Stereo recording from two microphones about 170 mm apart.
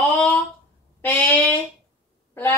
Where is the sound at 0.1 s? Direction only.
10° left (ahead or behind).